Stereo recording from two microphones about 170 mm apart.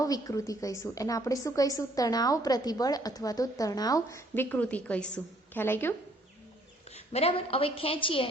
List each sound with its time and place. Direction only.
0.0 s a woman's voice: 20° left (ahead or behind)
6.9 s a woman's voice: 35° left (ahead or behind)